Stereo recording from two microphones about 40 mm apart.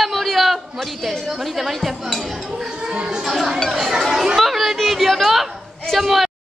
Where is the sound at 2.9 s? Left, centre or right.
Right.